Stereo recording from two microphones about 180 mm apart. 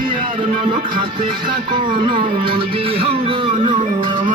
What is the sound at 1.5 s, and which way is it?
Music, 25° right (ahead or behind).